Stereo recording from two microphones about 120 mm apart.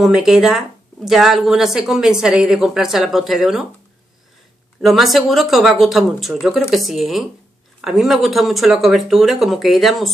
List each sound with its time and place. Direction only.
0.0 s speech: 5° right (ahead or behind)
4.8 s speech: centre (ahead or behind)